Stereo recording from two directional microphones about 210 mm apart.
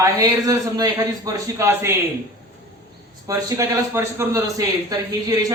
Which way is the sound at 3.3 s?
15° right (ahead or behind).